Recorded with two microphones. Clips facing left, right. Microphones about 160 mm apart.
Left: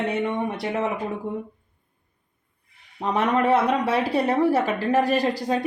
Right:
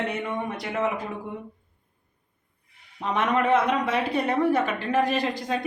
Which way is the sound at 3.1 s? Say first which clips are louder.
Left 2 dB; 35° left (ahead or behind).